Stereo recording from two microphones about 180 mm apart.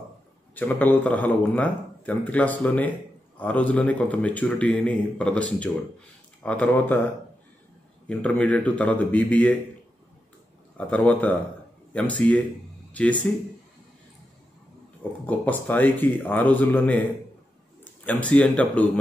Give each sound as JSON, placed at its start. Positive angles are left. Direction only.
{"t": 0.6, "sound": "speech", "side_deg": 10}
{"t": 8.1, "sound": "speech", "side_deg": 5}
{"t": 10.9, "sound": "speech", "side_deg": 10}
{"t": 15.2, "sound": "speech", "side_deg": 10}
{"t": 18.0, "sound": "speech", "side_deg": 5}